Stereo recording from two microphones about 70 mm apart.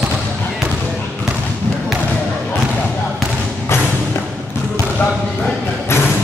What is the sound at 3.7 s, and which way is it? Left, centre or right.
Thump, left.